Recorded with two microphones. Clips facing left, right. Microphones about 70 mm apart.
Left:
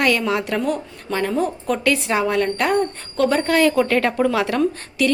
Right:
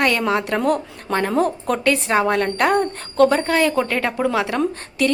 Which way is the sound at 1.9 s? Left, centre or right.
Right.